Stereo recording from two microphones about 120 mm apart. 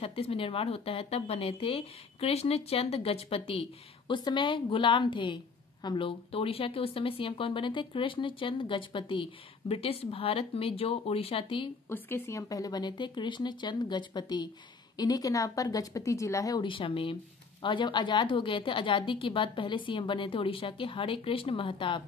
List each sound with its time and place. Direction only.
0.0 s speech: 55° left (ahead or behind)
4.1 s a woman's voice: 40° left (ahead or behind)
11.9 s speech: 20° left (ahead or behind)
16.6 s a woman's voice: 45° left (ahead or behind)